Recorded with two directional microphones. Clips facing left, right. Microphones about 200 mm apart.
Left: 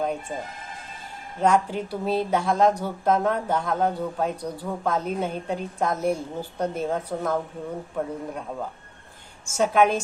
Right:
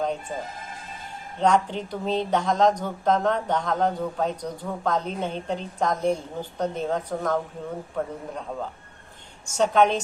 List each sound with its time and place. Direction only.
0.0 s speech: 10° left (ahead or behind)
1.4 s speech: 5° left (ahead or behind)
9.5 s speech: 5° left (ahead or behind)